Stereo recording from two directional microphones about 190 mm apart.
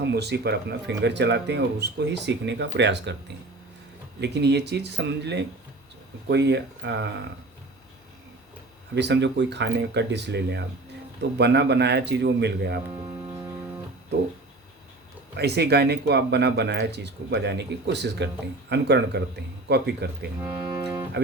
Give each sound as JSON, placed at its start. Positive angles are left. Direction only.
{"t": 0.0, "sound": "speech", "side_deg": -60}
{"t": 4.2, "sound": "speech", "side_deg": -60}
{"t": 9.0, "sound": "speech", "side_deg": -65}
{"t": 15.4, "sound": "speech", "side_deg": -60}
{"t": 20.4, "sound": "speech", "side_deg": -10}